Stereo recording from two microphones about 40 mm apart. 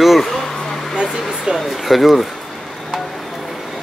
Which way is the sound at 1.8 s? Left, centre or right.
Centre.